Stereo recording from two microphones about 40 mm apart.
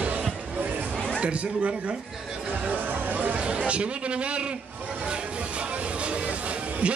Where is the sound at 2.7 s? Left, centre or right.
Right.